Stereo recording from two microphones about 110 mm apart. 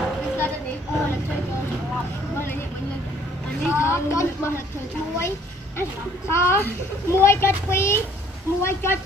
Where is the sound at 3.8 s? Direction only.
25° left (ahead or behind).